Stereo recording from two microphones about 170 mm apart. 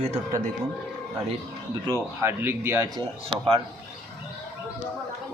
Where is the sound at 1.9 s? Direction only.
15° right (ahead or behind).